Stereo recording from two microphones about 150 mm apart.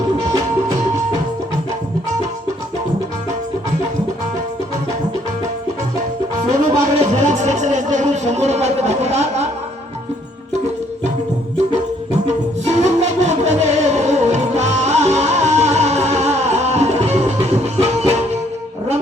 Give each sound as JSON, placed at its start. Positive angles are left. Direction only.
{"t": 6.3, "sound": "music", "side_deg": -45}
{"t": 12.1, "sound": "music", "side_deg": -45}